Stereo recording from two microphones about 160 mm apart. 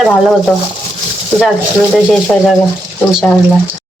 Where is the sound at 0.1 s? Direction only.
Centre (ahead or behind).